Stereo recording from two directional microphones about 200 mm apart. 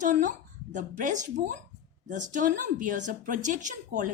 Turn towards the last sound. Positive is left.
turn(degrees=-40)  # may be behind; listen again after turning